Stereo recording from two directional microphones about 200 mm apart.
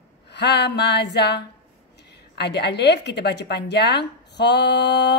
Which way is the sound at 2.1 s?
55° left (ahead or behind).